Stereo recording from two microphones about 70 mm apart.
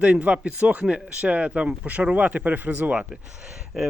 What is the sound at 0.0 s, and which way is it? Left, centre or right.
Speech, centre.